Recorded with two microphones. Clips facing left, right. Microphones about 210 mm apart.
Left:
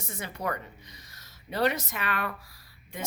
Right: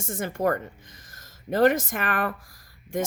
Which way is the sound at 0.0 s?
50° right (ahead or behind).